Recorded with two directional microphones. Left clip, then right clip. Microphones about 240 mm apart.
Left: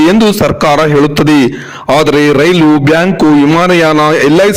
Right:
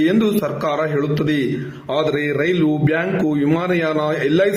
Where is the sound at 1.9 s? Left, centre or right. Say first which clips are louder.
Left 12 dB; left.